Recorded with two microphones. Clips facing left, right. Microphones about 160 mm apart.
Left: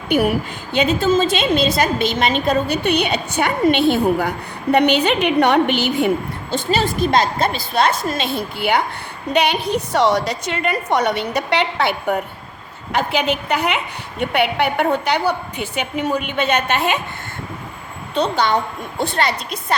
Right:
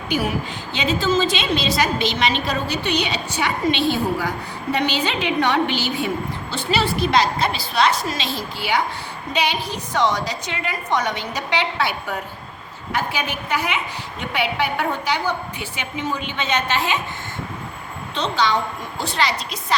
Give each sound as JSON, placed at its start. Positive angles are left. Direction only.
{"t": 0.1, "sound": "a woman's voice", "side_deg": 60}
{"t": 6.5, "sound": "a woman's voice", "side_deg": 45}
{"t": 18.1, "sound": "a woman's voice", "side_deg": 55}